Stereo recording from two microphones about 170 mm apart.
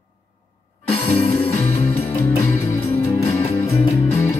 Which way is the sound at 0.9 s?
10° left (ahead or behind).